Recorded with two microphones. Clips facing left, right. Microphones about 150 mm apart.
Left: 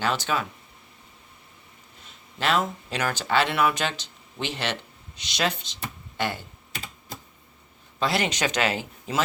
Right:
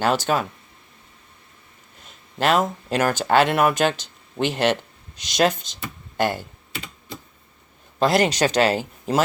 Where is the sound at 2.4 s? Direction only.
45° right (ahead or behind).